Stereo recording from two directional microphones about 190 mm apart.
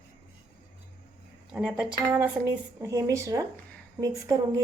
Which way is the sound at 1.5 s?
5° right (ahead or behind).